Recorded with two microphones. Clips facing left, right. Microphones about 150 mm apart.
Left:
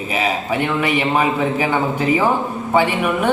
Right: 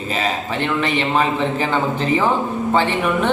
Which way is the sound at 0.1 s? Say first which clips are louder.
Left 2 dB; 10° left (ahead or behind).